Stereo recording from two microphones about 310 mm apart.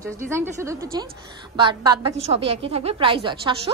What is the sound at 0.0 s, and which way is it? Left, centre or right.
A woman's voice, centre.